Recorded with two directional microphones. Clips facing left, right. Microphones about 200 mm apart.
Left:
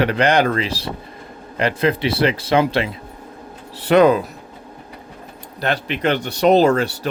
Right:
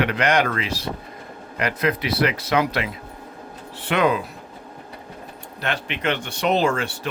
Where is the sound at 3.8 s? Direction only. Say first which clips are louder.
Left 8 dB; 40° left (ahead or behind).